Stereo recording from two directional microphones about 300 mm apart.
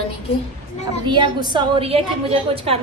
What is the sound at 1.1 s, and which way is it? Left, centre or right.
A woman's voice, centre.